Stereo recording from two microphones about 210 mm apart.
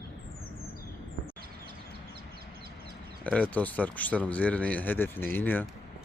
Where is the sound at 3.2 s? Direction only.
5° left (ahead or behind).